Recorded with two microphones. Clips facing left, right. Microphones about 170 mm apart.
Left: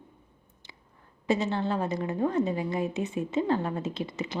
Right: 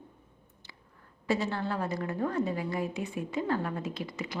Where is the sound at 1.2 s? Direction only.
20° left (ahead or behind).